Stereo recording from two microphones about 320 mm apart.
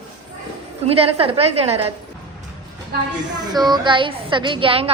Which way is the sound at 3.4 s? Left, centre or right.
Centre.